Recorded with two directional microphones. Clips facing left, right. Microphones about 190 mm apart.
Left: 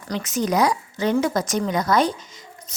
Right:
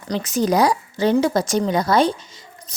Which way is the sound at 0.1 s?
35° right (ahead or behind).